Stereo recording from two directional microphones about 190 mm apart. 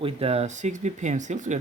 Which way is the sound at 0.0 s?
30° right (ahead or behind).